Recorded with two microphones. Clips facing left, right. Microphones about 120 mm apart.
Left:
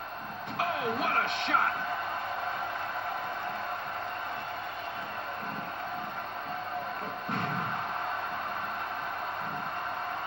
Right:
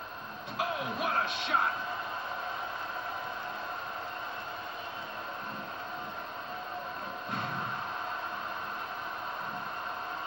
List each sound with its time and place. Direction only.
0.6 s music: 55° left (ahead or behind)